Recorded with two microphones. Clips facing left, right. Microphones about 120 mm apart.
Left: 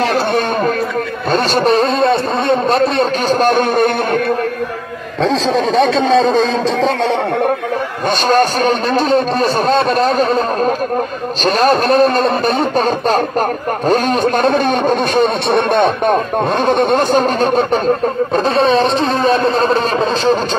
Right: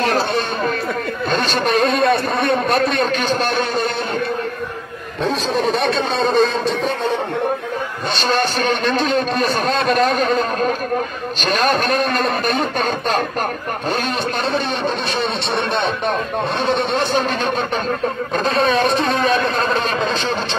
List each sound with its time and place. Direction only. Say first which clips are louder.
1.3 s speech: left 6 dB; 40° left (ahead or behind)
3.3 s speech: left 7 dB; 45° left (ahead or behind)
5.2 s speech: left 5 dB; 90° left
8.3 s speech: left 6 dB; 45° left (ahead or behind)